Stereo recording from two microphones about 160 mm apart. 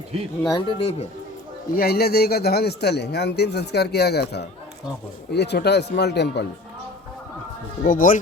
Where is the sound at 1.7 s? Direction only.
75° left (ahead or behind); by 6.4 s 90° left.